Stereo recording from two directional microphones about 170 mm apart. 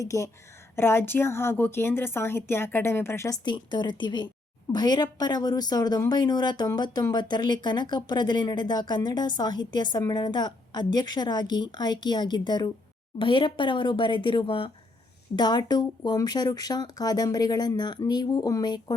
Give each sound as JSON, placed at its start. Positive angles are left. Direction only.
{"t": 0.0, "sound": "a woman's voice", "side_deg": 20}